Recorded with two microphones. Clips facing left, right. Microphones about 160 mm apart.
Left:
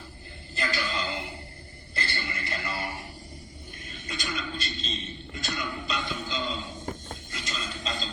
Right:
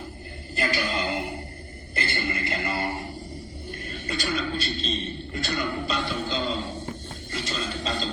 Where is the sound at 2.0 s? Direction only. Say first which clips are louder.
Right 6 dB; 55° right (ahead or behind).